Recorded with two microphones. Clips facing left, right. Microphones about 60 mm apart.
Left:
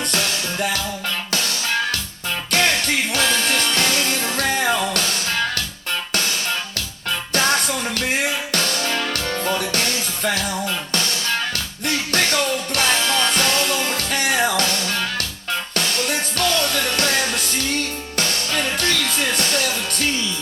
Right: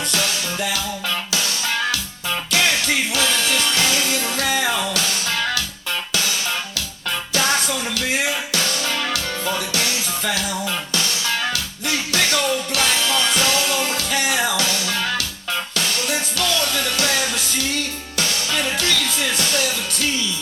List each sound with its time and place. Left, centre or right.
0.1 s music: left
6.1 s music: left
7.3 s music: left